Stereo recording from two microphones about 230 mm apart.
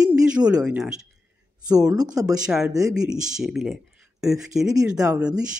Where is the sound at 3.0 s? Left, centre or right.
Centre.